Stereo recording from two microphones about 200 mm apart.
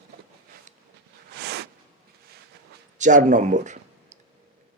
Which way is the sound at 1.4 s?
55° right (ahead or behind).